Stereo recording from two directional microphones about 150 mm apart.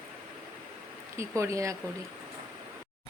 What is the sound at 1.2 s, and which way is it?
Speech, 20° right (ahead or behind).